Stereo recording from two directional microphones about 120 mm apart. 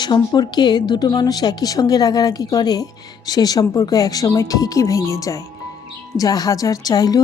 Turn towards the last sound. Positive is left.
turn(degrees=30)  # may be behind; listen again after turning